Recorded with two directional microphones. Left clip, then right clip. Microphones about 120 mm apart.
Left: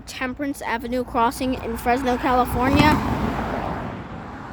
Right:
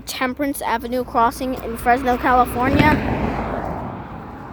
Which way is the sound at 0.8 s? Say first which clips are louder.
Right 3 dB; 10° left (ahead or behind).